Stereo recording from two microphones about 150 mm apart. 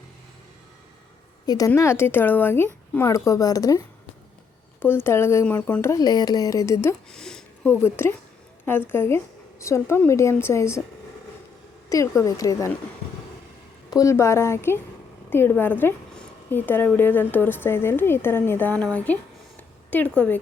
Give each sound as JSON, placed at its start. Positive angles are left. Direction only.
{"t": 1.5, "sound": "a woman's voice", "side_deg": 25}
{"t": 7.1, "sound": "a sound", "side_deg": 5}
{"t": 7.8, "sound": "a woman's voice", "side_deg": 15}
{"t": 11.9, "sound": "a woman's voice", "side_deg": 20}
{"t": 13.9, "sound": "a woman's voice", "side_deg": 20}